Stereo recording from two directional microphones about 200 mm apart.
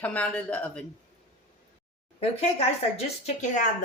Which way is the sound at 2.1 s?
30° left (ahead or behind).